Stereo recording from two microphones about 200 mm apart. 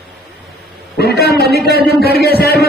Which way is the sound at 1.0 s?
55° left (ahead or behind).